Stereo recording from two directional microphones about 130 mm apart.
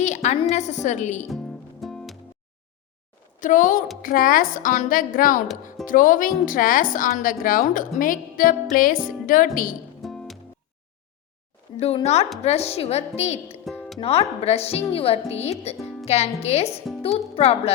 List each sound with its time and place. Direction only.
0.0 s a sound: 65° left (ahead or behind)
0.5 s a woman's voice: 65° left (ahead or behind)
1.3 s music: centre (ahead or behind)
3.4 s a woman's voice: 85° left
10.0 s music: centre (ahead or behind)
12.0 s a woman's voice: 55° left (ahead or behind)
13.7 s music: 5° left (ahead or behind)
14.0 s speech: 50° left (ahead or behind)
15.8 s music: centre (ahead or behind)
16.0 s a woman's voice: 55° left (ahead or behind)